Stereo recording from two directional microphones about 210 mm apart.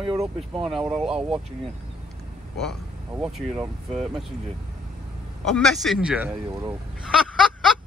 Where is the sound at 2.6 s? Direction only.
Centre (ahead or behind).